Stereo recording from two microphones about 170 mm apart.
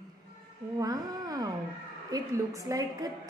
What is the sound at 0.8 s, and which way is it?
A woman's voice, 20° right (ahead or behind).